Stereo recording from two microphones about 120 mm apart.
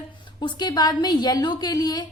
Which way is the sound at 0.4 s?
35° left (ahead or behind).